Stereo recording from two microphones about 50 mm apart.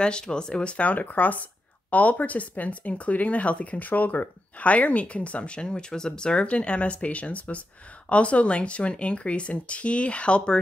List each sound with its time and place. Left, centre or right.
0.0 s speech: centre